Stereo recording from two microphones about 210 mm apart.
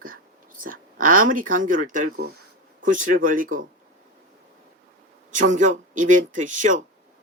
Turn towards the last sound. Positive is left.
turn(degrees=-35)  # may be behind; listen again after turning